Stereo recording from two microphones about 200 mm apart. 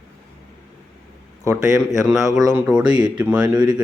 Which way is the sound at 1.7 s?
Centre (ahead or behind).